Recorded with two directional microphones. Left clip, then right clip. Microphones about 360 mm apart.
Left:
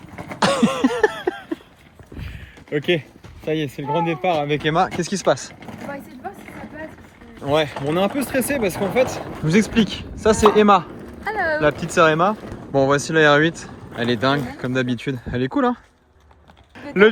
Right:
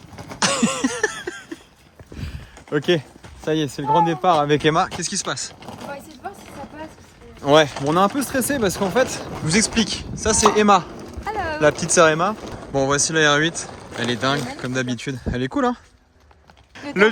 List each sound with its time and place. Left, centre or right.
0.3 s cough: centre
2.2 s a sound: centre
3.4 s speech: centre
4.9 s speech: centre
7.4 s speech: centre
7.7 s speech: centre